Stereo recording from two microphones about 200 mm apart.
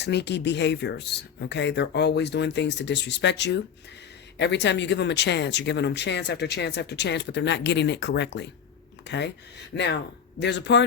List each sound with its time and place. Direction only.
0.0 s speech: 55° left (ahead or behind)